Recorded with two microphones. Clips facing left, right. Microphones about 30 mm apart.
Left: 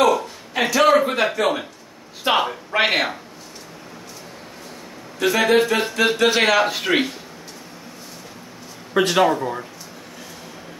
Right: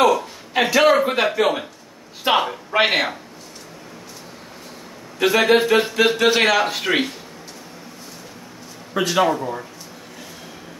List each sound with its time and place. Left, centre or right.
0.0 s a sound: centre
1.0 s a man's voice: centre
5.2 s a man's voice: centre
8.9 s a man's voice: left